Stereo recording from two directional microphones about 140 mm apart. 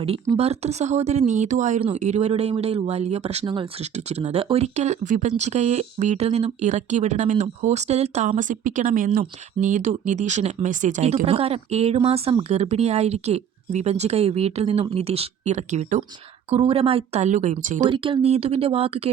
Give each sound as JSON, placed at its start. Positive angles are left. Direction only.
{"t": 0.3, "sound": "speech", "side_deg": -50}
{"t": 11.3, "sound": "speech", "side_deg": -45}
{"t": 16.5, "sound": "speech", "side_deg": -45}
{"t": 17.8, "sound": "speech", "side_deg": -35}